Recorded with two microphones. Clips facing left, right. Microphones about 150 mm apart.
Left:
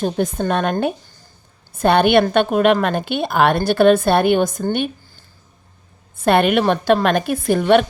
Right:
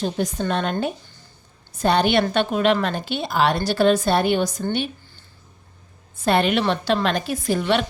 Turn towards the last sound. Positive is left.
turn(degrees=55)  # may be behind; listen again after turning